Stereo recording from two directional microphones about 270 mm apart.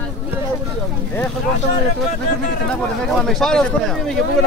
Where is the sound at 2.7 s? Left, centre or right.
Centre.